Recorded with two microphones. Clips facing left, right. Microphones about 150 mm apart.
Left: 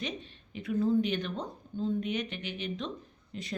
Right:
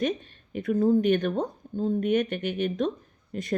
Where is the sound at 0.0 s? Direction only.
50° right (ahead or behind).